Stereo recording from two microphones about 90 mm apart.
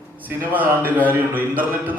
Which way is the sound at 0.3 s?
20° right (ahead or behind).